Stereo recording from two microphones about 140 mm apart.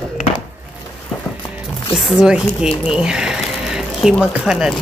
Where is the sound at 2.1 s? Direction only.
5° right (ahead or behind).